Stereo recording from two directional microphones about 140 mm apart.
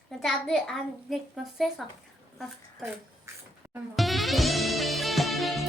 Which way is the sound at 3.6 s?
20° right (ahead or behind).